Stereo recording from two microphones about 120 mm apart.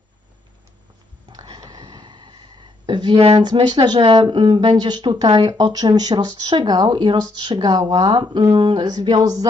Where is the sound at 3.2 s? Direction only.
60° right (ahead or behind).